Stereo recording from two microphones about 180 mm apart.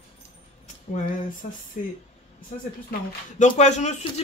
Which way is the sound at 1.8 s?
45° left (ahead or behind).